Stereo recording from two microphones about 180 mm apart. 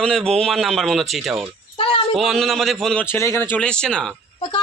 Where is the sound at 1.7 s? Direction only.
30° left (ahead or behind).